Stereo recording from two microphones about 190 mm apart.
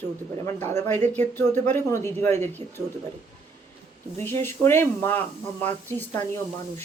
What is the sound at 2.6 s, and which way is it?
Speech, 35° right (ahead or behind).